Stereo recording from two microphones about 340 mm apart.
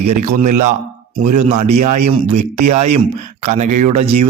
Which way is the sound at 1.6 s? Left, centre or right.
Right.